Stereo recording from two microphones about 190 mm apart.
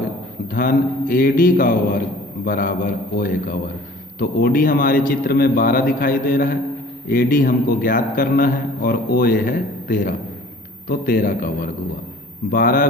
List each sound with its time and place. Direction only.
0.5 s a man's voice: 50° left (ahead or behind)